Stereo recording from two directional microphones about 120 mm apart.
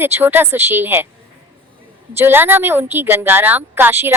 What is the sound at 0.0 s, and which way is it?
Speech, 20° right (ahead or behind).